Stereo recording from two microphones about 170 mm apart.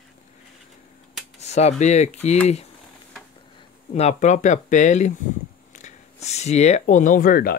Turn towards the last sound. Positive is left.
turn(degrees=55)  # may be behind; listen again after turning